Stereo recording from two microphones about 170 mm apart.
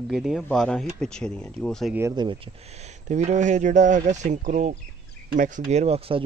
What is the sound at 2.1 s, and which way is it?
Speech, 30° right (ahead or behind).